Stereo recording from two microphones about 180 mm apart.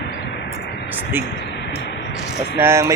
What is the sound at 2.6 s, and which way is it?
Speech, 15° right (ahead or behind).